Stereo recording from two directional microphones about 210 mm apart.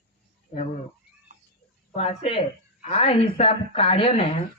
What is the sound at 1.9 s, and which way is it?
A man's voice, 30° left (ahead or behind).